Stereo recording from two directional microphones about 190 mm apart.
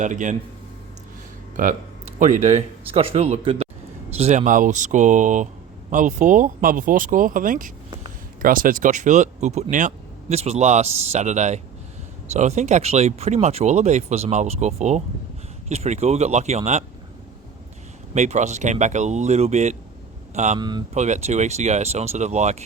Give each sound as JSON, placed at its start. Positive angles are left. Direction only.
{"t": 0.0, "sound": "speech", "side_deg": -40}
{"t": 1.6, "sound": "speech", "side_deg": -45}
{"t": 18.1, "sound": "speech", "side_deg": -40}
{"t": 20.6, "sound": "speech", "side_deg": -20}
{"t": 20.9, "sound": "speech", "side_deg": -40}